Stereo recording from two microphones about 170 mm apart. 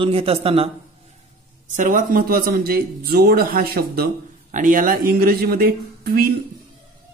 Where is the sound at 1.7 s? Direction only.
50° right (ahead or behind).